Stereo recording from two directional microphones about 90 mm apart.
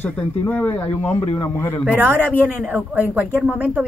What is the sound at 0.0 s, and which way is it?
Speech, 20° left (ahead or behind).